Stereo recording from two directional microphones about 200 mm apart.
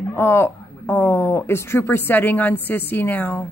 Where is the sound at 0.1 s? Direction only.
10° left (ahead or behind).